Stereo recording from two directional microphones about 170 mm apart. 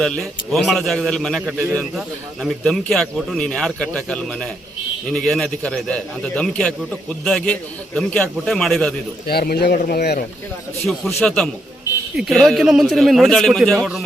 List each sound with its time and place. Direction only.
0.0 s a man's voice: centre (ahead or behind)
9.2 s speech: 65° left (ahead or behind)
10.8 s a man's voice: centre (ahead or behind)